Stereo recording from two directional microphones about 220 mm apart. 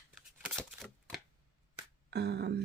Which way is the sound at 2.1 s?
50° right (ahead or behind).